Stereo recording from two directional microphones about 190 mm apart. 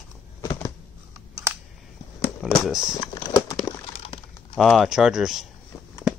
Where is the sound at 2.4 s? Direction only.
Centre (ahead or behind).